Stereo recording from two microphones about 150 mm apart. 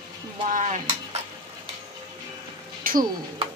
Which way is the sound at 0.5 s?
50° right (ahead or behind).